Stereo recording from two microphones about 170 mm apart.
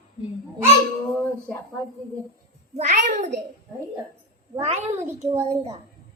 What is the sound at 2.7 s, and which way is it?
Speech, 45° right (ahead or behind).